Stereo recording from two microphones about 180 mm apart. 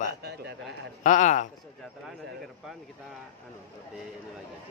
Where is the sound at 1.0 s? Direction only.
40° left (ahead or behind).